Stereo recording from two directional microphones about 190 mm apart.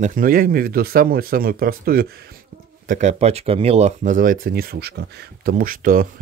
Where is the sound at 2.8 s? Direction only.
40° right (ahead or behind).